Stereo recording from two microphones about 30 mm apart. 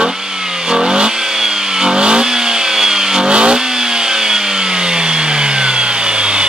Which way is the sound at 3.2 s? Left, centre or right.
Right.